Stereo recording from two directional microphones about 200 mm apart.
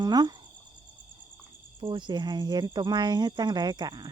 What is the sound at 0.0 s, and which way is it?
Cricket, 20° right (ahead or behind).